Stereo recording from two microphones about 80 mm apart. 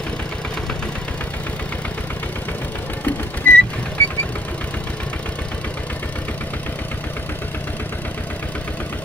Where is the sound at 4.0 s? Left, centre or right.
Left.